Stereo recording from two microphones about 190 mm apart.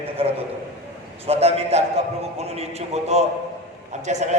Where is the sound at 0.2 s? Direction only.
30° right (ahead or behind).